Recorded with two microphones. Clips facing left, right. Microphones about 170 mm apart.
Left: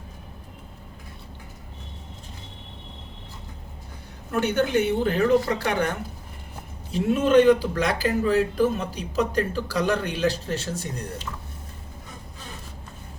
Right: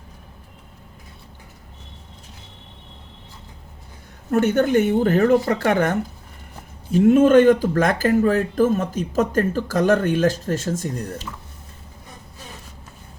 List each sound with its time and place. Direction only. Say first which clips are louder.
4.3 s speech: right 5 dB; 45° right (ahead or behind)